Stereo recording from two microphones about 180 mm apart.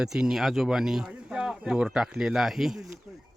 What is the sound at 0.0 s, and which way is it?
Speech, 5° right (ahead or behind).